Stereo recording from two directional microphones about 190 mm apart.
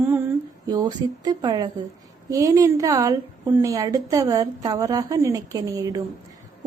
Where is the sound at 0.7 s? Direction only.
20° right (ahead or behind).